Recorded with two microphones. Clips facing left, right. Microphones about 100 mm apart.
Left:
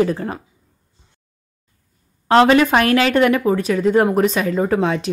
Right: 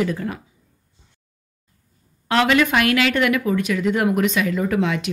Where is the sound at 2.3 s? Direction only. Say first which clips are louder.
Left 5 dB; 35° left (ahead or behind).